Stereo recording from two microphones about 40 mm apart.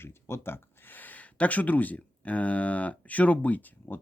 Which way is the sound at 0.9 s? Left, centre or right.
Left.